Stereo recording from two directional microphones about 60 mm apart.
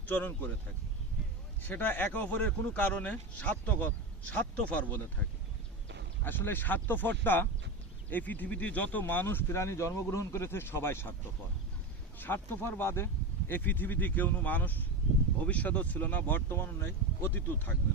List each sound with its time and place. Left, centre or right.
0.0 s speech: left
1.6 s speech: left
6.2 s speech: left
9.2 s speech: left
12.2 s speech: left